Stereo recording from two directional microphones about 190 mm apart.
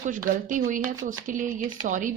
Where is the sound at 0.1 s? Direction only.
45° right (ahead or behind).